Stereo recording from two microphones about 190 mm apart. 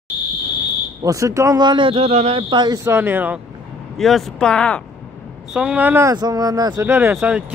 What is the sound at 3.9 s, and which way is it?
Speech, centre (ahead or behind).